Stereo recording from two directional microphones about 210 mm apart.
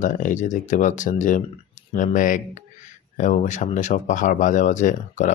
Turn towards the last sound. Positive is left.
turn(degrees=35)  # may be behind; listen again after turning